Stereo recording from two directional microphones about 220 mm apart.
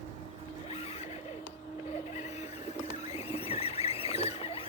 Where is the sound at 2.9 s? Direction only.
30° left (ahead or behind).